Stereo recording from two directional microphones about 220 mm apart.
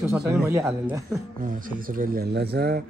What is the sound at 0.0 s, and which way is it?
Speech, 10° right (ahead or behind).